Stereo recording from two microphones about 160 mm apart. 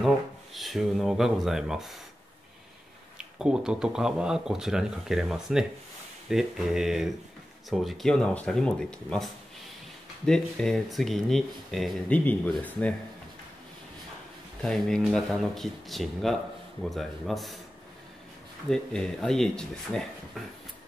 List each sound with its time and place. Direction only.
0.6 s speech: centre (ahead or behind)
3.2 s speech: 5° right (ahead or behind)
14.6 s speech: 5° left (ahead or behind)
18.7 s speech: 5° left (ahead or behind)